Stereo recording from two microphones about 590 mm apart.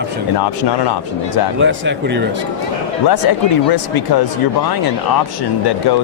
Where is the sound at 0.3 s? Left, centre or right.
Left.